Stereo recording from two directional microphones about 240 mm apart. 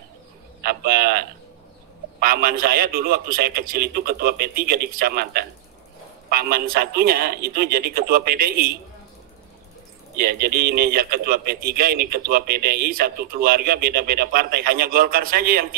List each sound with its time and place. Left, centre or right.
0.6 s a man's voice: right
10.1 s a man's voice: right